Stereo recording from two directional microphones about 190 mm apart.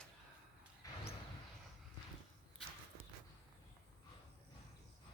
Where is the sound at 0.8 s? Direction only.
20° left (ahead or behind).